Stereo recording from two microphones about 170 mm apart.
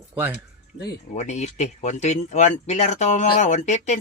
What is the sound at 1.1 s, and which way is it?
Speech, 40° left (ahead or behind).